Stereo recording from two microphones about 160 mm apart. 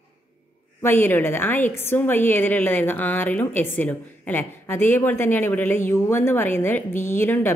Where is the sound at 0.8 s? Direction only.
15° left (ahead or behind).